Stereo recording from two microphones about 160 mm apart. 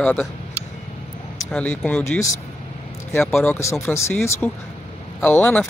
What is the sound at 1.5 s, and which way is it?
Speech, 5° left (ahead or behind).